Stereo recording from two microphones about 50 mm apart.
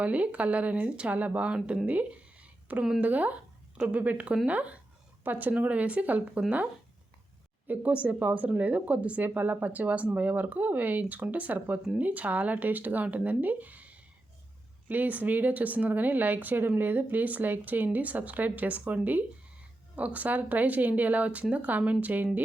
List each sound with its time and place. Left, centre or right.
0.0 s speech: right
1.9 s a sound: right
3.0 s a woman's voice: right
7.7 s a woman's voice: right
20.0 s a woman's voice: right